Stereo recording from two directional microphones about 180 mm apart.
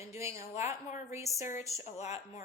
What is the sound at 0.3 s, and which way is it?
A woman's voice, 35° left (ahead or behind).